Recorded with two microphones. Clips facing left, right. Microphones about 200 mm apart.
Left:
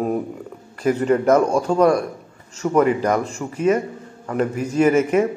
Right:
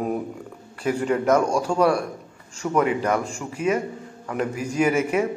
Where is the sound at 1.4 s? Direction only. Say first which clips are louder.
Left 4 dB; 35° left (ahead or behind).